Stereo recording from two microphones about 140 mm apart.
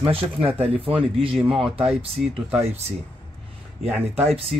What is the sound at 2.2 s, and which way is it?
Speech, centre (ahead or behind).